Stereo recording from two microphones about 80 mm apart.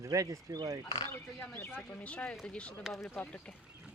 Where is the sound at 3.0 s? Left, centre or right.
Centre.